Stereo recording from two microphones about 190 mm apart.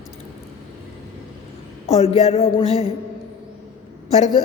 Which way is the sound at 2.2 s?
30° left (ahead or behind).